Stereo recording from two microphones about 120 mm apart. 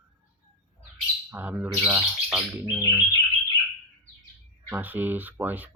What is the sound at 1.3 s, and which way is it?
Speech, 15° right (ahead or behind).